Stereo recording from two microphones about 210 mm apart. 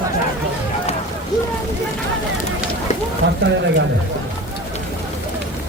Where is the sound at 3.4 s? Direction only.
55° right (ahead or behind).